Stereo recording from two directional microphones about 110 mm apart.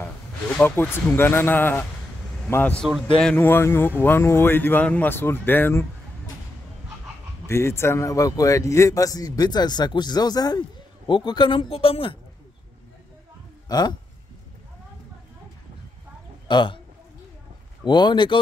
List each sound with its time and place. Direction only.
0.6 s speech: 20° left (ahead or behind)
7.4 s a man's voice: 25° left (ahead or behind); by 11.6 s 45° left (ahead or behind)
11.7 s a woman's voice: 60° left (ahead or behind)
13.7 s speech: 35° left (ahead or behind)
16.4 s speech: 45° left (ahead or behind)
17.8 s speech: 45° left (ahead or behind)